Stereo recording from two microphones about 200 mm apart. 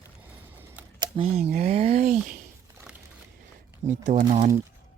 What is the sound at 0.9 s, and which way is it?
Speech, 25° right (ahead or behind).